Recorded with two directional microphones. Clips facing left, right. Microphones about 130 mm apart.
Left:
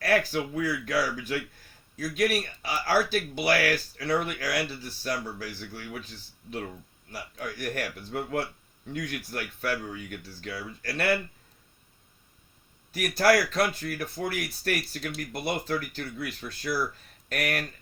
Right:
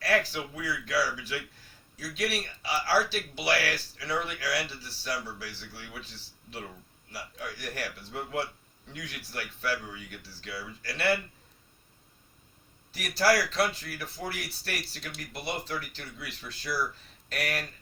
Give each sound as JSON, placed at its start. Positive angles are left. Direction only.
{"t": 0.0, "sound": "speech", "side_deg": 50}
{"t": 7.1, "sound": "speech", "side_deg": 50}
{"t": 12.9, "sound": "a man's voice", "side_deg": 50}